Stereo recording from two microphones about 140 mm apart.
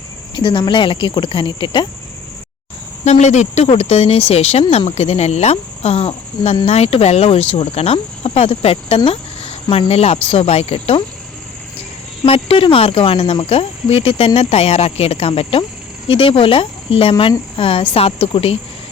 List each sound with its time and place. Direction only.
0.3 s speech: 35° left (ahead or behind)
3.0 s speech: 55° left (ahead or behind)
12.2 s speech: 40° left (ahead or behind)